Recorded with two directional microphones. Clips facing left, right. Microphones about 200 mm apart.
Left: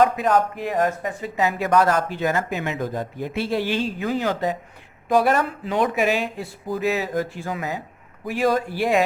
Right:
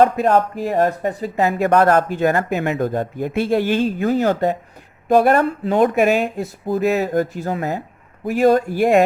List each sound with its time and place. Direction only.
0.3 s speech: 35° right (ahead or behind)